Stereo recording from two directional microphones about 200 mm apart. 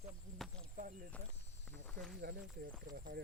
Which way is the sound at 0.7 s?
40° right (ahead or behind).